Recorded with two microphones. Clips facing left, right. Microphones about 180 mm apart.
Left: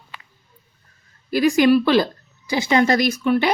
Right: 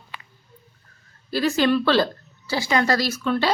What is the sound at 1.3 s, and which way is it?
Speech, 15° left (ahead or behind).